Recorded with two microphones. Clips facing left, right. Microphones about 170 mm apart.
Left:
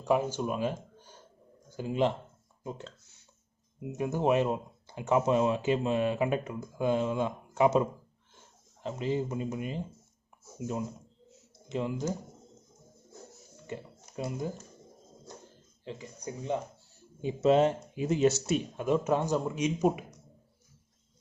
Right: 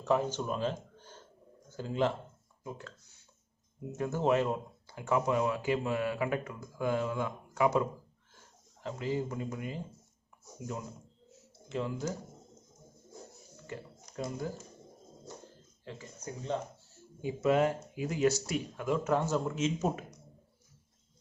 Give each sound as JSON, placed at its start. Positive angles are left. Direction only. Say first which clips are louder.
{"t": 0.0, "sound": "speech", "louder": "left 2 dB", "side_deg": 10}
{"t": 3.8, "sound": "speech", "louder": "left 2 dB", "side_deg": 15}
{"t": 11.7, "sound": "speech", "louder": "left 3 dB", "side_deg": 20}
{"t": 13.7, "sound": "speech", "louder": "left 3 dB", "side_deg": 20}
{"t": 15.8, "sound": "speech", "louder": "left 4 dB", "side_deg": 20}